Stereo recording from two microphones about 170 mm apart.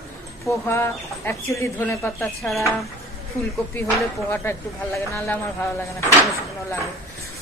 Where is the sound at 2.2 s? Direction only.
Centre (ahead or behind).